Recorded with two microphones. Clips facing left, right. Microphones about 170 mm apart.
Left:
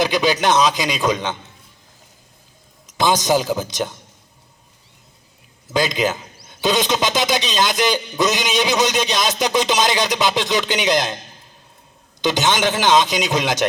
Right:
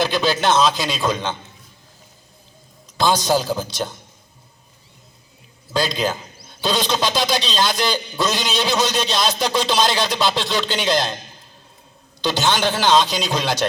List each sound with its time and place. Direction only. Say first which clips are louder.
0.0 s a man's voice: left 1 dB; 15° left (ahead or behind)
3.0 s a man's voice: left 1 dB; 20° left (ahead or behind)
5.7 s a man's voice: left 2 dB; 20° left (ahead or behind)
12.2 s a man's voice: left 1 dB; 20° left (ahead or behind)